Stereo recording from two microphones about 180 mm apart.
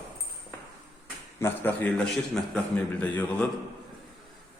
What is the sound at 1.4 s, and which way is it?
A man's voice, 10° left (ahead or behind).